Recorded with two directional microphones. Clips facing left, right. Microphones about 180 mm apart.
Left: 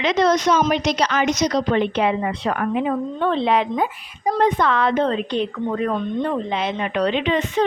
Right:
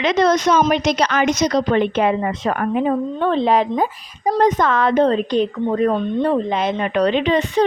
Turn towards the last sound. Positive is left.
turn(degrees=-35)  # may be behind; listen again after turning